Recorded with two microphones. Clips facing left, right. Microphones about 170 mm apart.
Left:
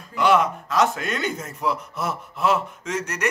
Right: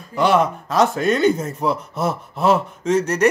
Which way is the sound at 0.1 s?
30° right (ahead or behind).